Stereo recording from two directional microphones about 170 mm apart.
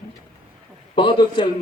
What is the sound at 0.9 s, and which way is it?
Speech, 30° left (ahead or behind).